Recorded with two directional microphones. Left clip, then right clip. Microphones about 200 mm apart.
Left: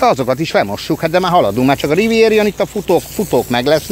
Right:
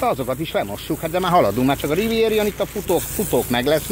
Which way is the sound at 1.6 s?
45° left (ahead or behind).